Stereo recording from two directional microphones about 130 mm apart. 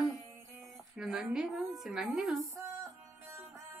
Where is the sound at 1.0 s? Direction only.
5° right (ahead or behind).